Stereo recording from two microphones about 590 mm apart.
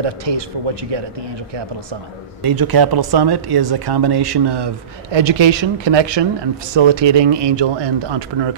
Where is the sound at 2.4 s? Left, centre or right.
Right.